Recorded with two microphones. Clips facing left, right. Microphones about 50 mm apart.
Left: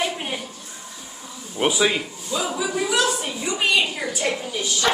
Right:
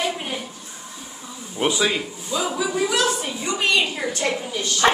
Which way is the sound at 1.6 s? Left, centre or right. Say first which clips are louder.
Left 1 dB; centre.